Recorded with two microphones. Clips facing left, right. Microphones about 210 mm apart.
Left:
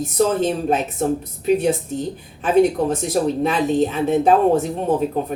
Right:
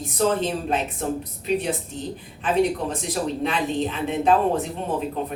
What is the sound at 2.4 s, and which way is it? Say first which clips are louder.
Speech: left 6 dB; 45° left (ahead or behind).